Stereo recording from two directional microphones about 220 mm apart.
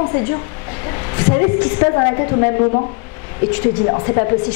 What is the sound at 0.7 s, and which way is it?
A woman's voice, 15° left (ahead or behind).